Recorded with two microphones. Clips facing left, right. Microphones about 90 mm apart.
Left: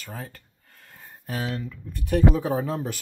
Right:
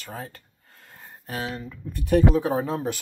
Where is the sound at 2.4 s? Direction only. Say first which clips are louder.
Right 1 dB; 10° right (ahead or behind).